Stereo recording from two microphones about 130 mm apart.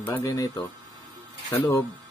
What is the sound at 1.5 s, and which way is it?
Speech, 15° left (ahead or behind).